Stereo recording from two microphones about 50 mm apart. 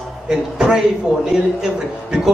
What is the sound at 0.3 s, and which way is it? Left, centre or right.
A man's voice, centre.